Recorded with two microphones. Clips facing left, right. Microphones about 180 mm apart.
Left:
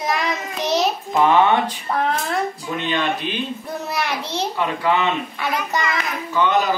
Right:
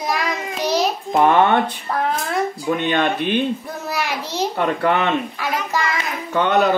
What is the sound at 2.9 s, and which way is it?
Speech, 55° right (ahead or behind).